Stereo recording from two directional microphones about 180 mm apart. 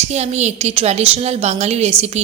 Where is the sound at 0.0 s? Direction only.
35° right (ahead or behind).